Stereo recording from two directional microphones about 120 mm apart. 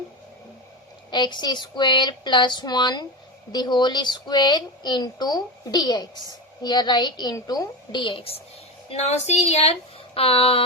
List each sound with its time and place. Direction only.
1.1 s a woman's voice: 40° left (ahead or behind)
8.9 s speech: 65° left (ahead or behind)
10.2 s a sound: 50° left (ahead or behind)